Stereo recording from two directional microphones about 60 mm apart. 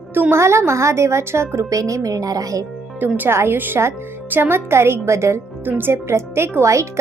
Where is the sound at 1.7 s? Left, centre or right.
Right.